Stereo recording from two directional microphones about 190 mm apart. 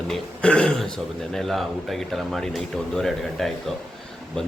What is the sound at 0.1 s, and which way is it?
Throat clearing, 5° left (ahead or behind).